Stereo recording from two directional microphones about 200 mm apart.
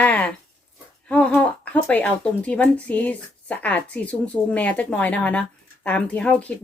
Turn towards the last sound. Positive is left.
turn(degrees=5)  # may be behind; listen again after turning